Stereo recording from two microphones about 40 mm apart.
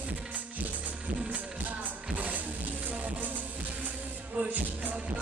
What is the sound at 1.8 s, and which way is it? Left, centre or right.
Music, right.